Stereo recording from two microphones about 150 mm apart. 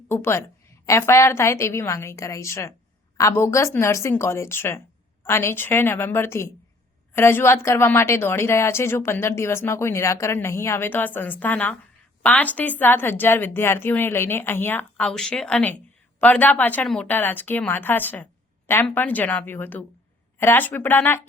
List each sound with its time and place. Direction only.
0.1 s a woman's voice: 15° left (ahead or behind)